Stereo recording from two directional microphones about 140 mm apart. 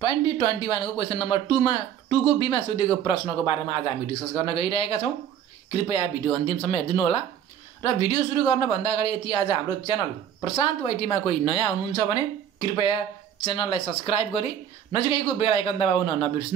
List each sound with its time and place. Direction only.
0.0 s speech: 35° left (ahead or behind)
7.8 s speech: 35° left (ahead or behind)